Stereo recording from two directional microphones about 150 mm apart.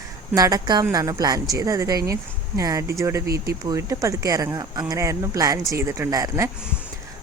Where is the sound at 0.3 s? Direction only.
25° right (ahead or behind).